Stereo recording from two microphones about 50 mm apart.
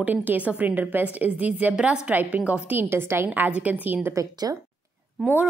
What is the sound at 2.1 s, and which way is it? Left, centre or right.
Speech, right.